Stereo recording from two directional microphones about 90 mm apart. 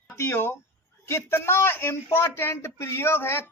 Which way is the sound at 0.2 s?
25° left (ahead or behind).